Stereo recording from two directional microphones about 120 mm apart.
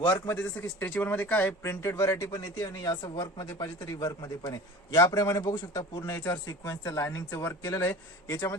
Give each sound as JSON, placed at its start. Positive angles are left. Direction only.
{"t": 0.0, "sound": "speech", "side_deg": 15}